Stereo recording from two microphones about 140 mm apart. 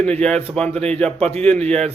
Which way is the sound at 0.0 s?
10° left (ahead or behind).